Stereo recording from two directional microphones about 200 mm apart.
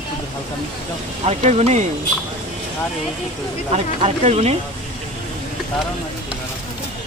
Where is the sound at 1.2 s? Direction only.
35° right (ahead or behind).